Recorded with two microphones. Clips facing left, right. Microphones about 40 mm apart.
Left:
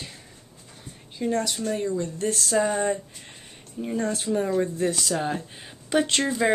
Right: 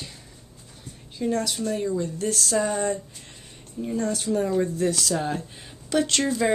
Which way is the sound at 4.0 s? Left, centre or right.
Centre.